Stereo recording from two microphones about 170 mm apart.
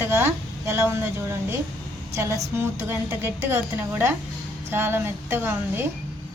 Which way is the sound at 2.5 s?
15° right (ahead or behind).